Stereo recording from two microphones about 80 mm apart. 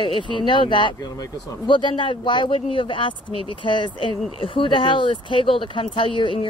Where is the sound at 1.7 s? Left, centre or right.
Left.